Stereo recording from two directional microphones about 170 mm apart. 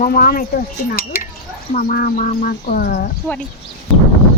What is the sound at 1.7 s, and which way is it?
Speech, 55° left (ahead or behind).